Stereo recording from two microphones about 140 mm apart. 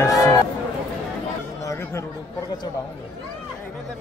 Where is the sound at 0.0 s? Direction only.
25° left (ahead or behind).